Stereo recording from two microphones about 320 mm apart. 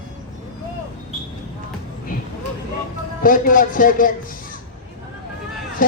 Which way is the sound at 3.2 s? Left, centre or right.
Left.